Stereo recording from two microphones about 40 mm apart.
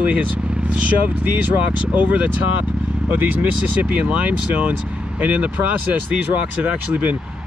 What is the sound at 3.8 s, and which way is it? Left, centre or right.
Speech, right.